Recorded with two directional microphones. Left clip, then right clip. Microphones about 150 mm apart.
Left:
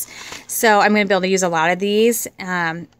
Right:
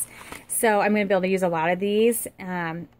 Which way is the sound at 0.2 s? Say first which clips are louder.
Left 6 dB; 25° left (ahead or behind).